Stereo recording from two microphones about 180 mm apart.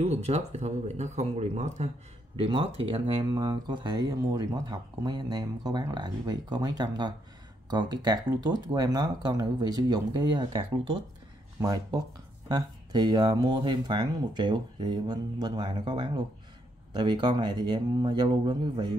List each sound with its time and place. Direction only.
0.0 s speech: 35° right (ahead or behind)